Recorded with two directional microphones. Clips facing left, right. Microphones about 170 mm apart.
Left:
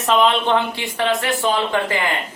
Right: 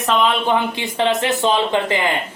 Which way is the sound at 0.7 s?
20° right (ahead or behind).